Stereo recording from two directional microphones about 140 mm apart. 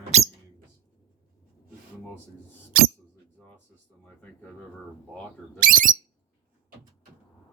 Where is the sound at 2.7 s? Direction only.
90° right.